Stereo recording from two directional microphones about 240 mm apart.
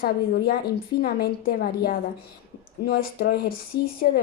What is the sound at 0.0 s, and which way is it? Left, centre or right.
Speech, left.